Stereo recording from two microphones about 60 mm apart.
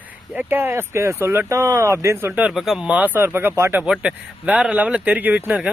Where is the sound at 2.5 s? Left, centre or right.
Centre.